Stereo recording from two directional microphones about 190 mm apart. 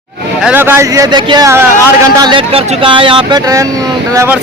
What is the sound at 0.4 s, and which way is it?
Speech, 10° right (ahead or behind).